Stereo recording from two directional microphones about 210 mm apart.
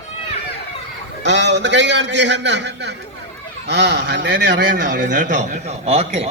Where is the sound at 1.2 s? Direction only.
55° right (ahead or behind).